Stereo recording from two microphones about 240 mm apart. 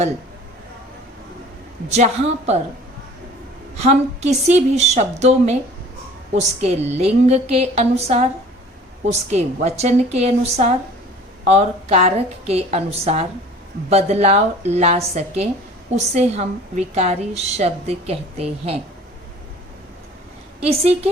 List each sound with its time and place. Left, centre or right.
1.9 s a woman's voice: right
3.8 s a woman's voice: right
20.7 s a woman's voice: right